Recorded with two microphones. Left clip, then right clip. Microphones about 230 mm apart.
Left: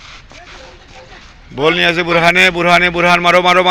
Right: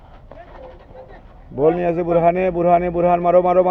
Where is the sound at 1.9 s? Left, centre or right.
Left.